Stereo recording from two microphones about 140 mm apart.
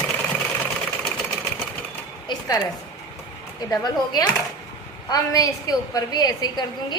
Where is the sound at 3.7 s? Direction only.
30° left (ahead or behind).